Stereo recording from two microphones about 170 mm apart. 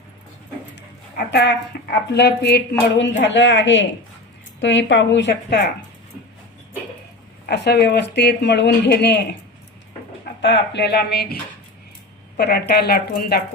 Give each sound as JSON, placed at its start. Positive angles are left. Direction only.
{"t": 0.8, "sound": "a sound", "side_deg": 80}
{"t": 2.1, "sound": "speech", "side_deg": 75}
{"t": 2.9, "sound": "a woman's voice", "side_deg": 90}
{"t": 7.4, "sound": "speech", "side_deg": 75}
{"t": 10.4, "sound": "speech", "side_deg": 90}
{"t": 12.4, "sound": "speech", "side_deg": 70}